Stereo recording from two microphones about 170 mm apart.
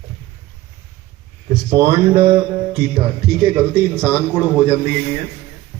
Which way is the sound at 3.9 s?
10° right (ahead or behind).